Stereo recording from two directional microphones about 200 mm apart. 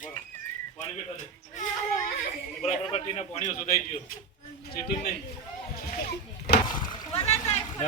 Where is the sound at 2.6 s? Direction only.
30° left (ahead or behind).